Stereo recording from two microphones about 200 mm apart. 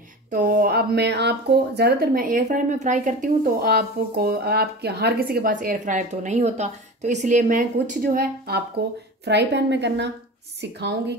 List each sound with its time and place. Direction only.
0.3 s a woman's voice: 45° right (ahead or behind)